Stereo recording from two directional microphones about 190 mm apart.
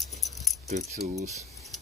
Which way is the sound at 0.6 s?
35° right (ahead or behind).